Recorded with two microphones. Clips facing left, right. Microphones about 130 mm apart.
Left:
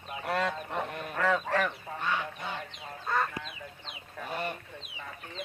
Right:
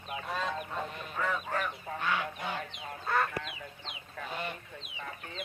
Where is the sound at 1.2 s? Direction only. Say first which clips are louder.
Left 5 dB; 90° left.